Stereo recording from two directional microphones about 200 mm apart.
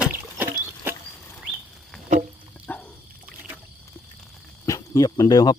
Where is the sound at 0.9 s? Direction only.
10° right (ahead or behind).